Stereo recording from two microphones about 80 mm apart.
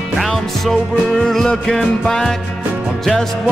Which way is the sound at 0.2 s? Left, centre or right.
Centre.